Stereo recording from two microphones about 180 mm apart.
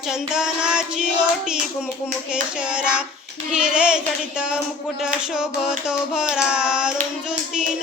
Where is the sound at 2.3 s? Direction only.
5° right (ahead or behind).